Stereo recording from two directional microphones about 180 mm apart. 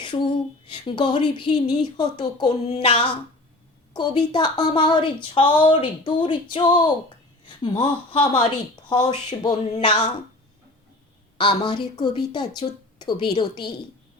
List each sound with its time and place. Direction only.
0.0 s a woman's voice: 25° left (ahead or behind)
11.3 s a woman's voice: 25° left (ahead or behind)